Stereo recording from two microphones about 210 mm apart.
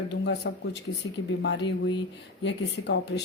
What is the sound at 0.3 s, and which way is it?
A woman's voice, 55° left (ahead or behind).